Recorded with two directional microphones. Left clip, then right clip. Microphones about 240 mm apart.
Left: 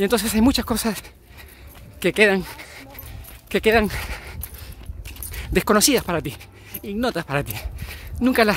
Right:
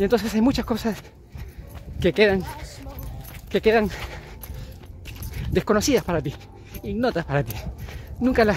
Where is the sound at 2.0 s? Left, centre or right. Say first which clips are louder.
Left 2 dB; centre.